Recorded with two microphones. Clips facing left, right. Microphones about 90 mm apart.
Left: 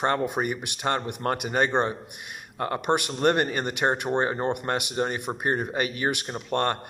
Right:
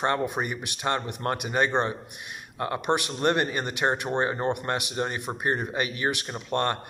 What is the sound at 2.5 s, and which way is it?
Speech, 40° left (ahead or behind).